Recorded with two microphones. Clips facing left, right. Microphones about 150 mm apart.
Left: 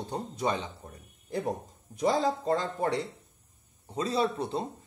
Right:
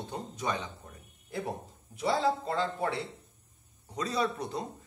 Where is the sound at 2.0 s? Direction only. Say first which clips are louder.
Left 2 dB; 40° left (ahead or behind).